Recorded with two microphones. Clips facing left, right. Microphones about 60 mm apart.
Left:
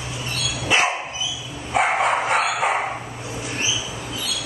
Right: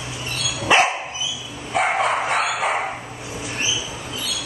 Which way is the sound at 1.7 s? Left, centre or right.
Centre.